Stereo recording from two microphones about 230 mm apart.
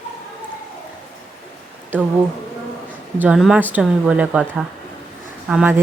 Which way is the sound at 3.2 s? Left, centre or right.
Centre.